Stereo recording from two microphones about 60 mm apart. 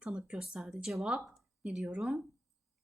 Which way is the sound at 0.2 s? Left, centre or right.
Centre.